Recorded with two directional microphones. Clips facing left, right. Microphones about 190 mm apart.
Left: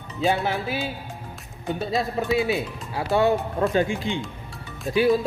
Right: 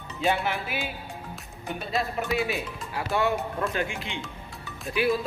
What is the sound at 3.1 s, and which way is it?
Speech, 35° left (ahead or behind).